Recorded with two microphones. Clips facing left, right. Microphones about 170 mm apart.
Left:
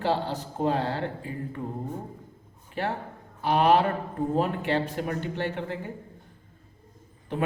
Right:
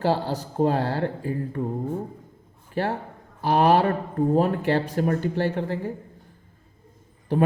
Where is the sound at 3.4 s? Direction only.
40° right (ahead or behind).